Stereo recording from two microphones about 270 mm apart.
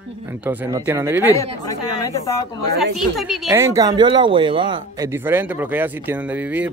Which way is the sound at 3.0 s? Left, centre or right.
Centre.